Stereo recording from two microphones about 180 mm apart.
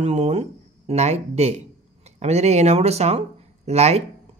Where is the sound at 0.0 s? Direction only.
40° right (ahead or behind).